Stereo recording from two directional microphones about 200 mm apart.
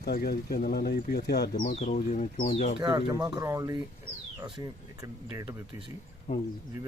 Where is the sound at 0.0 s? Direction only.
50° left (ahead or behind).